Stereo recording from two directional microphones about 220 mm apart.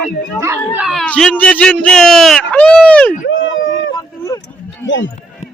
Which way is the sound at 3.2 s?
60° left (ahead or behind).